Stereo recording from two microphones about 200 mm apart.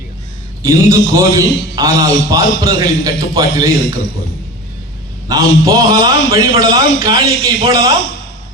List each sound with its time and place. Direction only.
0.6 s a man's voice: 15° right (ahead or behind)
5.3 s a man's voice: 20° right (ahead or behind)